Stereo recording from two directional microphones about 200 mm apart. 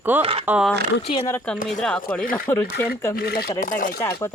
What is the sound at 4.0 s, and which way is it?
Speech, 15° left (ahead or behind).